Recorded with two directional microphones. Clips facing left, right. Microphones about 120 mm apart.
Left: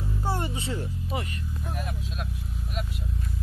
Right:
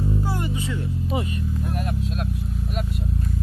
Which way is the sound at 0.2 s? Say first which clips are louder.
Right 3 dB; 30° left (ahead or behind).